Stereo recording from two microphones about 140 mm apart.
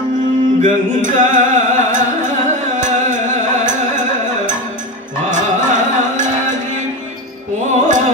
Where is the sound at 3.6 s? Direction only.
65° right (ahead or behind).